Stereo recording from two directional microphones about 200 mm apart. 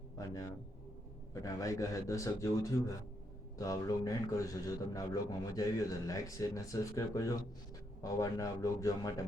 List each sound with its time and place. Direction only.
0.2 s a man's voice: 15° left (ahead or behind)